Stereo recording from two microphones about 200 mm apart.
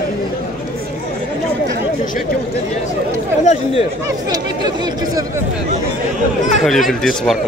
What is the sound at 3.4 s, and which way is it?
Speech, 35° left (ahead or behind).